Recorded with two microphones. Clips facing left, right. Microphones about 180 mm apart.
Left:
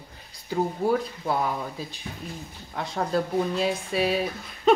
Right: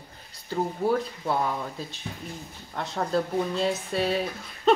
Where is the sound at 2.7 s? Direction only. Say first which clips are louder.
Even; 5° left (ahead or behind).